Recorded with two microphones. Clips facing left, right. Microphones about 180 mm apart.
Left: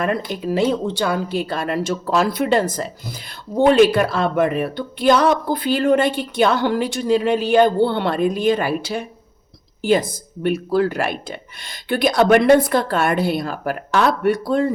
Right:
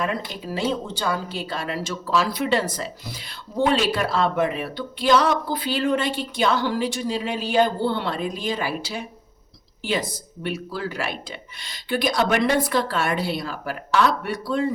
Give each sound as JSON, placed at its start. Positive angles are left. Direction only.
{"t": 0.0, "sound": "speech", "side_deg": 60}